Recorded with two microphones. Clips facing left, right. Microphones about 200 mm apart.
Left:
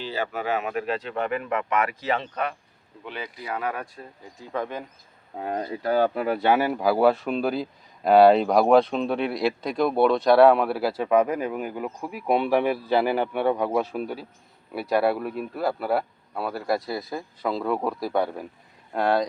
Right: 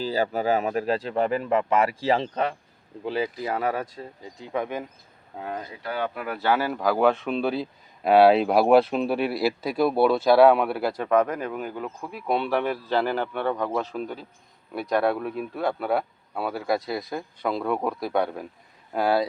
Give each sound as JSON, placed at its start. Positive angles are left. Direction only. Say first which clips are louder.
{"t": 0.0, "sound": "speech", "louder": "right 4 dB", "side_deg": -35}
{"t": 5.4, "sound": "speech", "louder": "left 5 dB", "side_deg": 40}